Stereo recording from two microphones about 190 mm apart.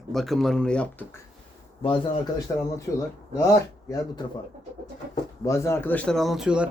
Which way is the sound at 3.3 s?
15° left (ahead or behind).